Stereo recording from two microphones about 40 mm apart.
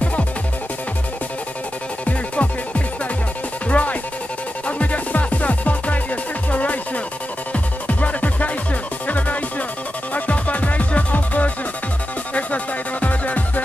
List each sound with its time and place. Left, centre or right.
0.0 s music: left
2.0 s music: left